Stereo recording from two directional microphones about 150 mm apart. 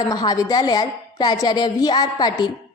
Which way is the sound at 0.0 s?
25° left (ahead or behind).